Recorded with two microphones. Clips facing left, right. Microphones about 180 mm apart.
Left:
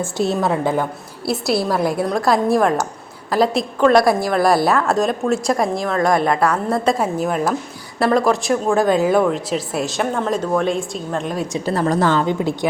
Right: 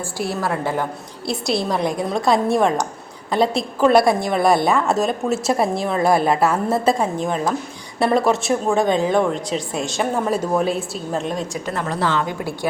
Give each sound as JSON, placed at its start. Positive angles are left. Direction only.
{"t": 0.0, "sound": "a woman's voice", "side_deg": 20}
{"t": 1.2, "sound": "speech", "side_deg": 5}
{"t": 6.3, "sound": "a woman's voice", "side_deg": -25}
{"t": 7.0, "sound": "a woman's voice", "side_deg": 5}
{"t": 11.6, "sound": "a woman's voice", "side_deg": 35}
{"t": 12.2, "sound": "a woman's voice", "side_deg": 25}